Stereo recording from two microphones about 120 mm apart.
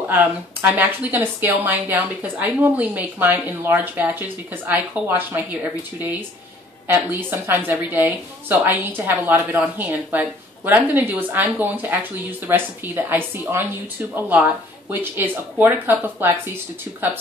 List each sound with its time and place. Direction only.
0.1 s speech: 15° right (ahead or behind)